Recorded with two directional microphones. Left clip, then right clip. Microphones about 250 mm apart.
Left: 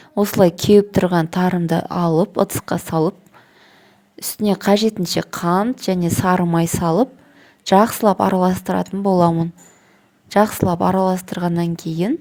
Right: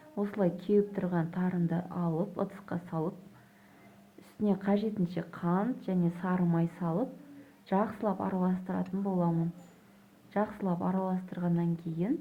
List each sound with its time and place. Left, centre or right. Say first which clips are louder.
0.2 s a woman's voice: left 17 dB; left
4.2 s a woman's voice: left 13 dB; left